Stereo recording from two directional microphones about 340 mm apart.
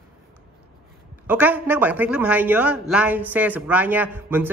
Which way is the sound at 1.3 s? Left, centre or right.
Centre.